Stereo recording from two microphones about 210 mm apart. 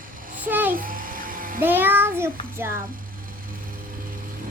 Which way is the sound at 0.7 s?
40° right (ahead or behind).